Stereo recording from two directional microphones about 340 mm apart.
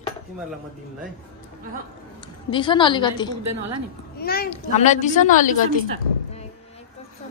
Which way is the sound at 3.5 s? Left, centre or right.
Right.